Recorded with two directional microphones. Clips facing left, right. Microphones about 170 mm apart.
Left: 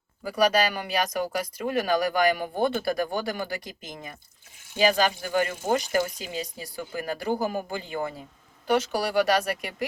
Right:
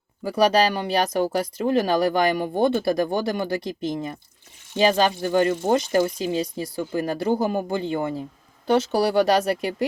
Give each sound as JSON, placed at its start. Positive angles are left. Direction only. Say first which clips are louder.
{"t": 0.3, "sound": "speech", "louder": "right 4 dB", "side_deg": -30}